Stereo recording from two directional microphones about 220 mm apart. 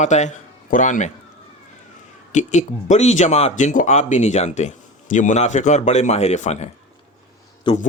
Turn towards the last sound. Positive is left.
turn(degrees=30)  # may be behind; listen again after turning